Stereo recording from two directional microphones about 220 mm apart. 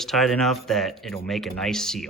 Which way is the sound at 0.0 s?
Centre (ahead or behind).